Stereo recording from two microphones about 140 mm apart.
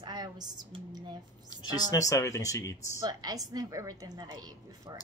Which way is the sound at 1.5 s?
25° left (ahead or behind).